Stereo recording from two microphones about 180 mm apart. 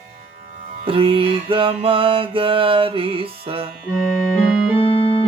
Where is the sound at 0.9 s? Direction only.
30° right (ahead or behind).